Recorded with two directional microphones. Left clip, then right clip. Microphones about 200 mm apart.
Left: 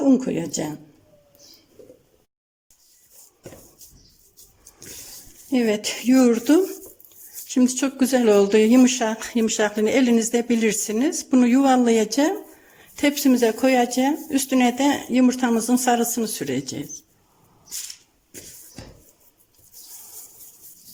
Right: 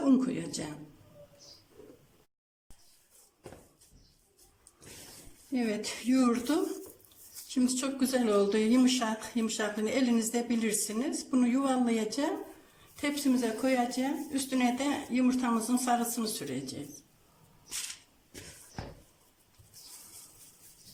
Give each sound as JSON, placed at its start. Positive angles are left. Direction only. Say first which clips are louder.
{"t": 0.1, "sound": "speech", "louder": "left 8 dB", "side_deg": 35}
{"t": 5.5, "sound": "speech", "louder": "left 12 dB", "side_deg": 45}